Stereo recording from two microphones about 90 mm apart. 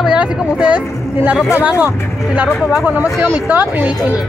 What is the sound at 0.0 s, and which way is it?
Speech, 10° right (ahead or behind).